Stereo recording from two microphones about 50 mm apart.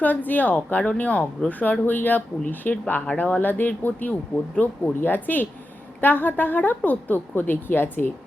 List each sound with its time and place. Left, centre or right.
0.0 s a woman's voice: left
5.0 s a woman's voice: left